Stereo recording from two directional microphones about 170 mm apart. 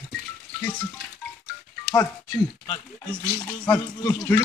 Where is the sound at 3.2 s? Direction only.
15° left (ahead or behind).